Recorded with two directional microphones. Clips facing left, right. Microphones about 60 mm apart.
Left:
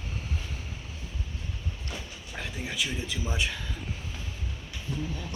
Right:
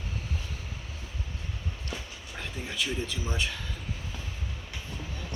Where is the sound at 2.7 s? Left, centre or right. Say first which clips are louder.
Right 1 dB; centre.